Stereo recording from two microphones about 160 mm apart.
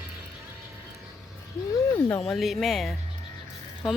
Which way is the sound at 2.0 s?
10° left (ahead or behind).